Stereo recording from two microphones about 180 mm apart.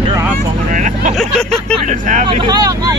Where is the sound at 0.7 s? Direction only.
45° right (ahead or behind).